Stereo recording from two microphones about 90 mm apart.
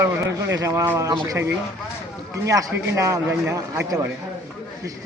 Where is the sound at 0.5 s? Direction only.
40° right (ahead or behind).